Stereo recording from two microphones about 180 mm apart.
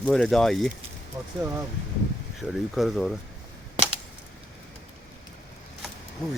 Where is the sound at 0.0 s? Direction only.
Centre (ahead or behind).